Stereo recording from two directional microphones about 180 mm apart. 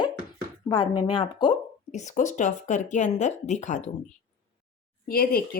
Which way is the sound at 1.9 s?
40° left (ahead or behind).